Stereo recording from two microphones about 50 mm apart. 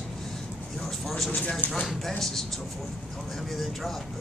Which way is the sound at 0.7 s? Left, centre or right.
Centre.